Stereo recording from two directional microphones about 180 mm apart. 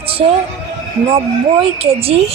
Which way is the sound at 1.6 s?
35° right (ahead or behind).